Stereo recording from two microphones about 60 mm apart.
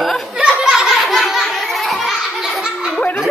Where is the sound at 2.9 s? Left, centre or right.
Left.